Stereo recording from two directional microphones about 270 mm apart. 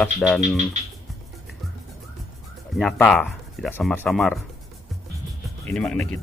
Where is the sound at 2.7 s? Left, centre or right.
Centre.